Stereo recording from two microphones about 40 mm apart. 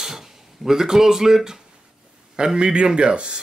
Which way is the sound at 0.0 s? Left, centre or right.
Centre.